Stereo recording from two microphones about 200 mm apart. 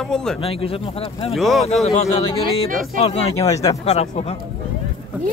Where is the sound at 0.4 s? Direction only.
30° left (ahead or behind).